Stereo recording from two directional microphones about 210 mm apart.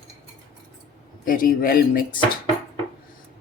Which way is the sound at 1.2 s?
40° left (ahead or behind).